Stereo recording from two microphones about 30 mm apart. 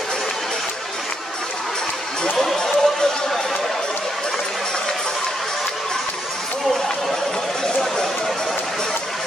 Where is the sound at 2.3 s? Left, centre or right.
Centre.